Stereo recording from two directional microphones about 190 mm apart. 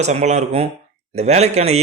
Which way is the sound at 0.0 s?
35° right (ahead or behind).